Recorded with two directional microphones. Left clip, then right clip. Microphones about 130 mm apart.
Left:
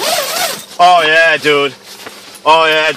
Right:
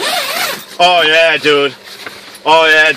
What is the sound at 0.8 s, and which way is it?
Speech, 5° left (ahead or behind).